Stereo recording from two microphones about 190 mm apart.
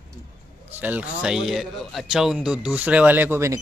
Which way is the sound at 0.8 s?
5° right (ahead or behind).